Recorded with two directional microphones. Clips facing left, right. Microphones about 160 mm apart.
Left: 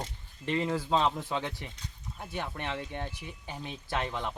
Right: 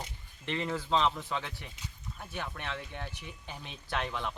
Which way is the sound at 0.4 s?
10° left (ahead or behind).